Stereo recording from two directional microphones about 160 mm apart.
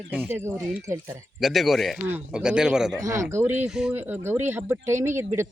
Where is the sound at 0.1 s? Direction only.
10° right (ahead or behind).